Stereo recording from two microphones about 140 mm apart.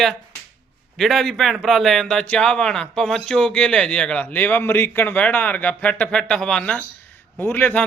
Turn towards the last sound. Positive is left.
turn(degrees=15)  # may be behind; listen again after turning